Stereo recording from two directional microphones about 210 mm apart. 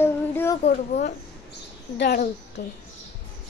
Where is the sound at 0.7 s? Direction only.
40° left (ahead or behind).